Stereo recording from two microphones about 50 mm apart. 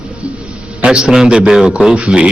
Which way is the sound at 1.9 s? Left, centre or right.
Right.